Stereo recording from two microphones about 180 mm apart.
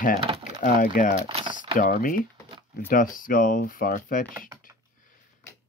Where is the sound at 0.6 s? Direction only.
50° left (ahead or behind).